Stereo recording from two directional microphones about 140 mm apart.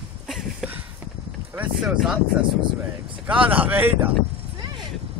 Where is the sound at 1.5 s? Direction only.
5° right (ahead or behind).